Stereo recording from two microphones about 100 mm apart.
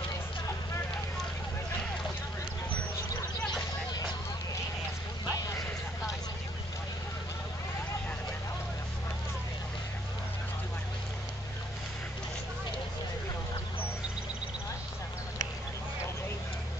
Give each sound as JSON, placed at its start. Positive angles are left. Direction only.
{"t": 5.3, "sound": "clip-clop", "side_deg": 35}